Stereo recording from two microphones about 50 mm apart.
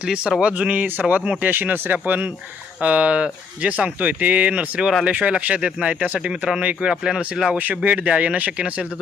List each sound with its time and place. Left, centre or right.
0.1 s speech: centre
1.4 s speech: right
2.8 s speech: right
6.9 s speech: centre
7.6 s speech: right